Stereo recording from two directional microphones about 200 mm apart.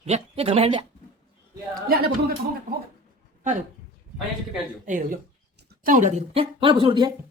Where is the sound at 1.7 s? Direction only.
50° right (ahead or behind).